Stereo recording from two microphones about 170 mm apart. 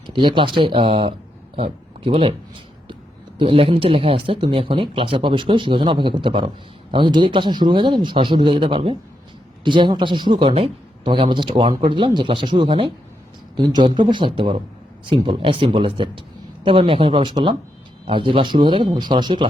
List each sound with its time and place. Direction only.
0.1 s a man's voice: 30° right (ahead or behind)
3.3 s a man's voice: 35° right (ahead or behind)